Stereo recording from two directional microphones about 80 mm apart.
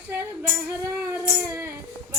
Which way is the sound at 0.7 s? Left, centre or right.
Right.